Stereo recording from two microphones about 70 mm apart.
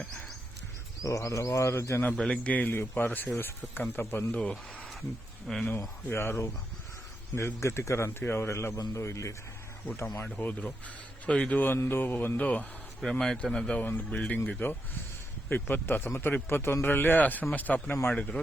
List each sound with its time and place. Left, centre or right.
1.0 s bird: left
1.7 s speech: left
2.1 s a man's voice: centre; by 4.3 s left
4.3 s a man's voice: centre
5.5 s speech: centre
6.1 s speech: left
8.8 s bird: left
9.8 s a man's voice: left; by 11.6 s centre
11.6 s speech: left
12.4 s speech: centre
13.0 s a man's voice: centre